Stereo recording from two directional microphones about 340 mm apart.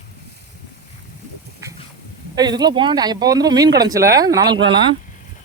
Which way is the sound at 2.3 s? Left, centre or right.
Centre.